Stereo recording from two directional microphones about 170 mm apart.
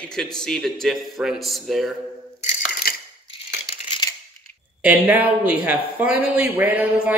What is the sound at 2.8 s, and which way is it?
Crushing, 60° left (ahead or behind).